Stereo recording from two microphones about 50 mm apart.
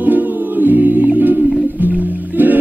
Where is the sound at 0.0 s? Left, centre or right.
Right.